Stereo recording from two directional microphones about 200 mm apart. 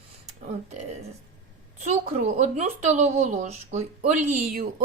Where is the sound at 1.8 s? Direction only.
35° right (ahead or behind).